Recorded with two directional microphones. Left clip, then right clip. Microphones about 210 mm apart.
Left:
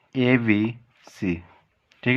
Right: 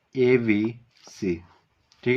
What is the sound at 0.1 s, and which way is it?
Speech, 40° left (ahead or behind).